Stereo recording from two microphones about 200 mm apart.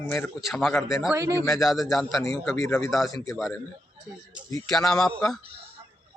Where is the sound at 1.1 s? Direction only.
15° right (ahead or behind).